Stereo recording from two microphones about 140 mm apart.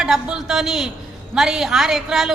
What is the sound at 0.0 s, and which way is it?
A woman's voice, 5° right (ahead or behind).